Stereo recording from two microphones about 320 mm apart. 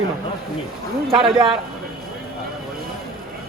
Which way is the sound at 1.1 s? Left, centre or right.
Centre.